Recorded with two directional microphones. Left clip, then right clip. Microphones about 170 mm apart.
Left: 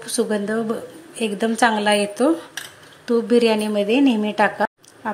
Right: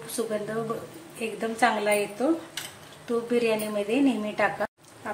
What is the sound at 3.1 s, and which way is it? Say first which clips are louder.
Speech: left 8 dB; 45° left (ahead or behind).